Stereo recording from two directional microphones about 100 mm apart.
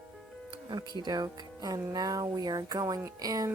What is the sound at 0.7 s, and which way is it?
A woman's voice, 50° right (ahead or behind).